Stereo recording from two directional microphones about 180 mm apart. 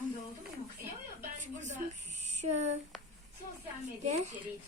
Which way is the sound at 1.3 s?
40° right (ahead or behind).